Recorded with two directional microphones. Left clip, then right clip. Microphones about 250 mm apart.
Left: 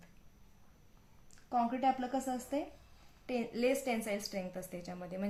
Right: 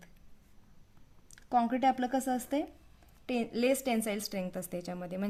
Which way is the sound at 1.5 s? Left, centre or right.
Right.